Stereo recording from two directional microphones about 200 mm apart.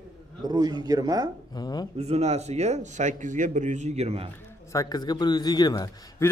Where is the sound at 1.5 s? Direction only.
20° left (ahead or behind).